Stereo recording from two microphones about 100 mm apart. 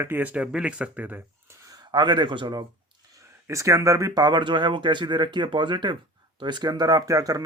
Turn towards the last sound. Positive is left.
turn(degrees=-35)  # may be behind; listen again after turning